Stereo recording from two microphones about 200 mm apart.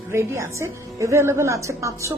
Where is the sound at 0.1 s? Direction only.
15° right (ahead or behind).